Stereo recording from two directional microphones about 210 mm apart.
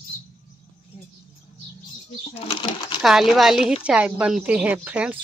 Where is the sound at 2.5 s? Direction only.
25° left (ahead or behind).